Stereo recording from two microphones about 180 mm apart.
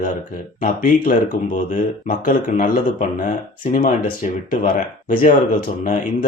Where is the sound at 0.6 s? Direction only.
50° left (ahead or behind).